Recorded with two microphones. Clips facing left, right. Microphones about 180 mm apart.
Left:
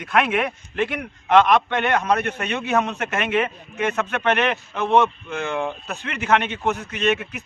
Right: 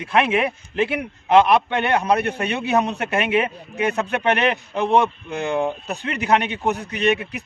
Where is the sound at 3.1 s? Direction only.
10° right (ahead or behind).